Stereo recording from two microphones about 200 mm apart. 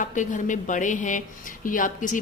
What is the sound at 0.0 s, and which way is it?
Speech, 40° left (ahead or behind).